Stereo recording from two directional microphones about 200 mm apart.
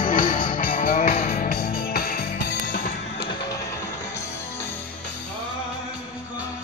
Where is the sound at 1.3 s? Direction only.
45° left (ahead or behind).